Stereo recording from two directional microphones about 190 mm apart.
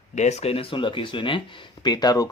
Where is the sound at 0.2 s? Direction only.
35° left (ahead or behind).